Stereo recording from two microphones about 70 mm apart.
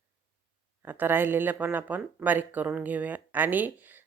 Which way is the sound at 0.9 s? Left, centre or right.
Right.